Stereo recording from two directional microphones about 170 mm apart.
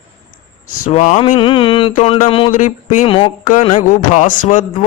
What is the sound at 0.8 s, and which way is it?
Speech, 45° left (ahead or behind).